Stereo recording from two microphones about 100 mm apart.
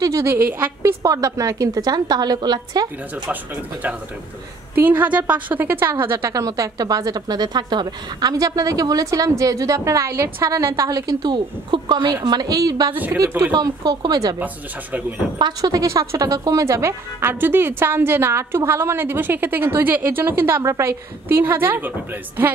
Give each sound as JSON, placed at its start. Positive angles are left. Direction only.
{"t": 0.0, "sound": "a woman's voice", "side_deg": -30}
{"t": 1.0, "sound": "speech", "side_deg": -35}
{"t": 4.8, "sound": "a woman's voice", "side_deg": -15}
{"t": 6.3, "sound": "speech", "side_deg": -35}
{"t": 12.9, "sound": "speech", "side_deg": -20}
{"t": 13.5, "sound": "speech", "side_deg": -45}
{"t": 14.4, "sound": "speech", "side_deg": -15}
{"t": 15.3, "sound": "a woman's voice", "side_deg": -40}